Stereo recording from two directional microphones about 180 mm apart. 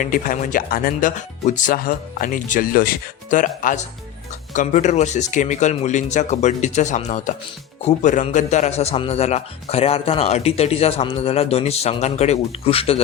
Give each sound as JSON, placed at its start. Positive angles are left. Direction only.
{"t": 0.0, "sound": "speech", "side_deg": 50}